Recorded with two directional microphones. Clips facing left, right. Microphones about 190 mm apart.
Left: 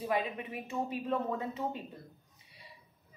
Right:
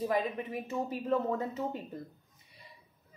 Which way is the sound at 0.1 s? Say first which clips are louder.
Right 2 dB; 40° right (ahead or behind).